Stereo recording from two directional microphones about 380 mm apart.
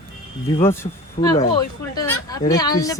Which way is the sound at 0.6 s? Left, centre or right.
Centre.